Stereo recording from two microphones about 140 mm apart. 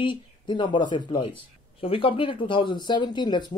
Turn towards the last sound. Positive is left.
turn(degrees=30)  # may be behind; listen again after turning